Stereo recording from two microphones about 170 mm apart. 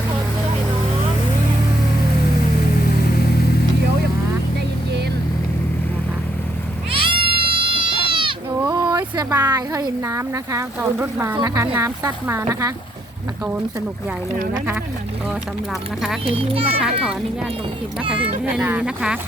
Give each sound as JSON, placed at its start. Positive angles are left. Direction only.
{"t": 6.9, "sound": "cat", "side_deg": -30}
{"t": 8.1, "sound": "sheep", "side_deg": -30}
{"t": 8.7, "sound": "speech", "side_deg": -25}
{"t": 16.2, "sound": "a child's voice", "side_deg": -35}
{"t": 18.4, "sound": "speech", "side_deg": -5}